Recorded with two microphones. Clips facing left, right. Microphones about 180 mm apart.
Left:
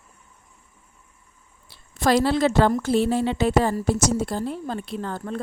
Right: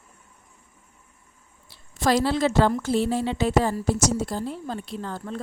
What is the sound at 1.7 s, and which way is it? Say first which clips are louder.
A woman's voice: left 2 dB; 60° left (ahead or behind).